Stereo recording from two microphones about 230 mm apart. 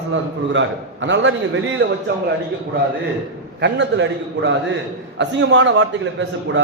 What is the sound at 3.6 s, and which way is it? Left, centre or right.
A man's voice, right.